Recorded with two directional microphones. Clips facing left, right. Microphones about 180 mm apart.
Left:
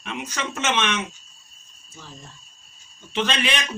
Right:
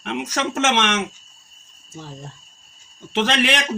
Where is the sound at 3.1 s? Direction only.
80° right.